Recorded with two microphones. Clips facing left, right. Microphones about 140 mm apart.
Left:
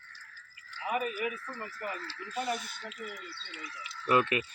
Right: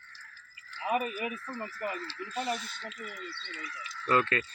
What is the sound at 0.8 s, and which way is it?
Speech, 25° right (ahead or behind).